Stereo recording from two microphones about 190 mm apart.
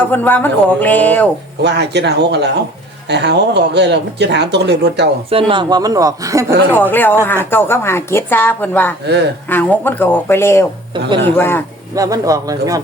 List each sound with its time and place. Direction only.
0.1 s a woman's voice: 10° left (ahead or behind)
1.6 s speech: 60° right (ahead or behind)
5.3 s speech: 25° right (ahead or behind)
6.9 s a woman's voice: 10° left (ahead or behind)
9.0 s speech: 60° right (ahead or behind)
9.5 s a woman's voice: 10° left (ahead or behind)
11.9 s a man's voice: 20° right (ahead or behind)